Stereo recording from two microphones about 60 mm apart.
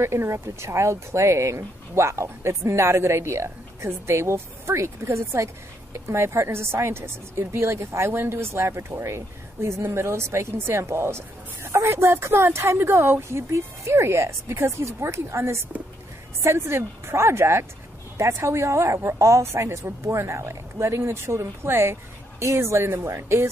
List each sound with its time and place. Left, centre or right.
0.0 s a woman's voice: right